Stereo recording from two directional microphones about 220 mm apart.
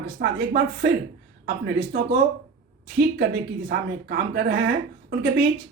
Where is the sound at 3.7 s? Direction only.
45° right (ahead or behind).